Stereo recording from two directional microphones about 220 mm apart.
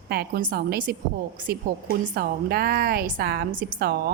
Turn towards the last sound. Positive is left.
turn(degrees=-45)  # may be behind; listen again after turning